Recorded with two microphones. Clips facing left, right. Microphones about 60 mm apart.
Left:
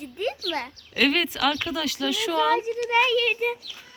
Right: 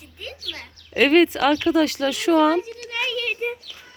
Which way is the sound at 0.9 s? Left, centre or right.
Right.